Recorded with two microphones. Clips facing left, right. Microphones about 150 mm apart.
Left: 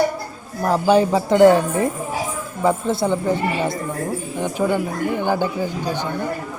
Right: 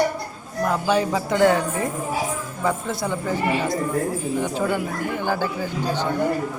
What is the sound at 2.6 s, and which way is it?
A woman's voice, 25° left (ahead or behind).